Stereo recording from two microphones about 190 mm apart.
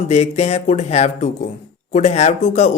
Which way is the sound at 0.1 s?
35° left (ahead or behind).